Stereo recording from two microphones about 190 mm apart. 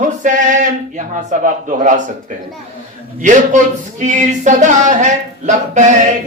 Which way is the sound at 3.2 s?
40° right (ahead or behind).